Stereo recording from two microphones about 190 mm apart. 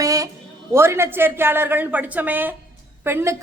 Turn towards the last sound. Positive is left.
turn(degrees=-15)  # may be behind; listen again after turning